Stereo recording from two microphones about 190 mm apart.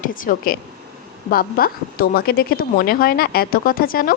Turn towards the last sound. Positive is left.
turn(degrees=50)  # may be behind; listen again after turning